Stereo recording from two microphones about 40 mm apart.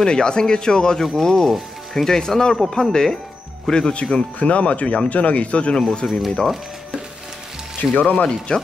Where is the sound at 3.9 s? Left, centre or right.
Left.